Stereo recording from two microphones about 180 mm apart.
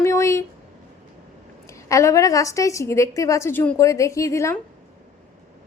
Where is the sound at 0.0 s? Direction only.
15° left (ahead or behind).